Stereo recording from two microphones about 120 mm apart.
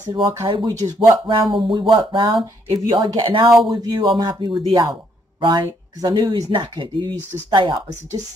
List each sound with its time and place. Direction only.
0.1 s speech: 25° right (ahead or behind)
0.5 s speech: 35° right (ahead or behind)